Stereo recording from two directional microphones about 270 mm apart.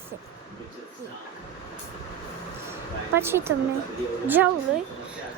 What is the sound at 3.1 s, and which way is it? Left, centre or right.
Speech, centre.